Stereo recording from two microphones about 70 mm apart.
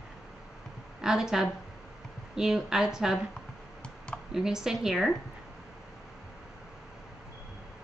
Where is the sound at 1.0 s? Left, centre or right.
Centre.